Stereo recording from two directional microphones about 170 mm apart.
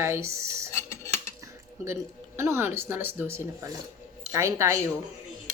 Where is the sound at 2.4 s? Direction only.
15° right (ahead or behind).